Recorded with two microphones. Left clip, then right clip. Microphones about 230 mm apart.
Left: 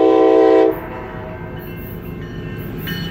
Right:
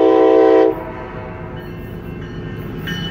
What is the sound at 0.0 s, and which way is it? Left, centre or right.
Train, centre.